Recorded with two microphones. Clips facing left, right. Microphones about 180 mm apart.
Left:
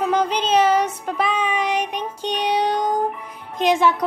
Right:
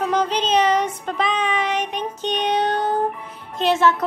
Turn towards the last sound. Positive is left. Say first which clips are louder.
# even
turn(degrees=15)  # may be behind; listen again after turning